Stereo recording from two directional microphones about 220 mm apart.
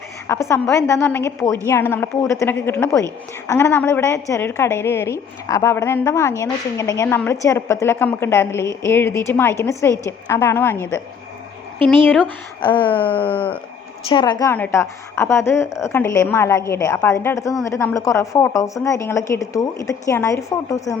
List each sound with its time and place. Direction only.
0.3 s a woman's voice: 10° left (ahead or behind)
11.9 s a woman's voice: 10° left (ahead or behind)
12.6 s a sound: 20° left (ahead or behind)
13.1 s a woman's voice: 5° left (ahead or behind)
14.1 s a woman's voice: 20° left (ahead or behind)